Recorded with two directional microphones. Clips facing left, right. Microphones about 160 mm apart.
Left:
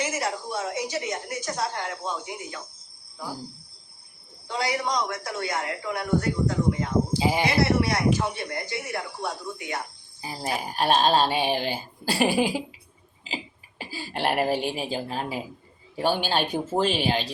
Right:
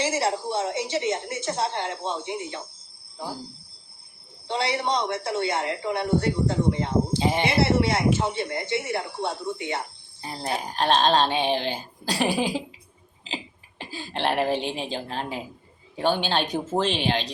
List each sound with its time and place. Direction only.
0.0 s a woman's voice: 30° right (ahead or behind)
4.4 s a woman's voice: 30° right (ahead or behind)
7.2 s a woman's voice: 5° left (ahead or behind)
7.4 s a woman's voice: 25° right (ahead or behind)
10.2 s cricket: 10° left (ahead or behind)
10.6 s a woman's voice: 10° left (ahead or behind)